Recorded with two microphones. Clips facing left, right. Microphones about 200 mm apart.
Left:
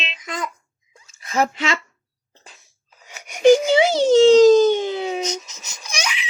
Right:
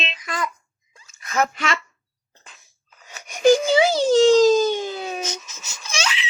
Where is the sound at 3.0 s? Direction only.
10° left (ahead or behind).